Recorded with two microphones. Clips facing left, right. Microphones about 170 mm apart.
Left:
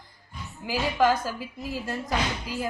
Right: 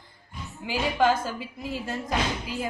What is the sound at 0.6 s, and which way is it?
A woman's voice, 25° right (ahead or behind).